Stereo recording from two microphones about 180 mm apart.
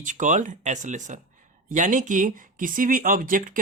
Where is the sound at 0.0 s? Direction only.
45° right (ahead or behind).